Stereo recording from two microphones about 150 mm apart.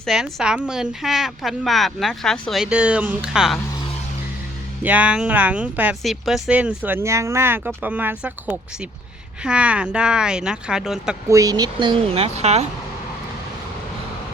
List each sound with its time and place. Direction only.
0.0 s a woman's voice: centre (ahead or behind)
4.8 s a woman's voice: 10° right (ahead or behind)
11.3 s speech: 25° right (ahead or behind); by 12.6 s 45° right (ahead or behind)